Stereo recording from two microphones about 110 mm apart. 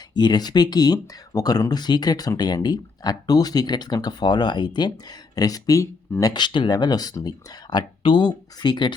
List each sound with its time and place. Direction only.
0.1 s speech: 40° left (ahead or behind)
6.3 s speech: 45° left (ahead or behind)